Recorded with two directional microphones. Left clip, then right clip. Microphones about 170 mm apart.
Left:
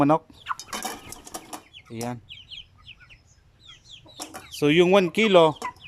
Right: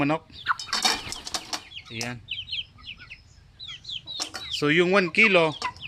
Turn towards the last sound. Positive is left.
turn(degrees=15)  # may be behind; listen again after turning